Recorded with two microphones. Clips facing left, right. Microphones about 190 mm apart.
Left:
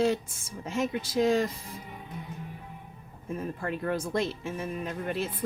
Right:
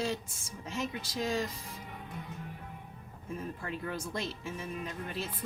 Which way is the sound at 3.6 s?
60° left (ahead or behind).